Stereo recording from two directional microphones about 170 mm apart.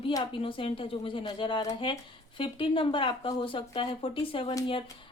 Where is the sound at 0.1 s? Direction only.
30° left (ahead or behind).